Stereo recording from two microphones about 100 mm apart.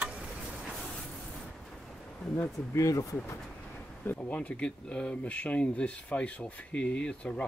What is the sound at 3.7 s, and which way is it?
Speech, 15° left (ahead or behind).